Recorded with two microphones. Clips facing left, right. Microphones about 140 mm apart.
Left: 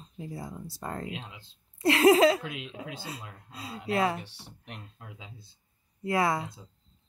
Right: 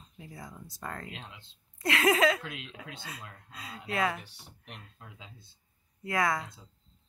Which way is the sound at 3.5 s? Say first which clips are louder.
Left 6 dB; 30° left (ahead or behind).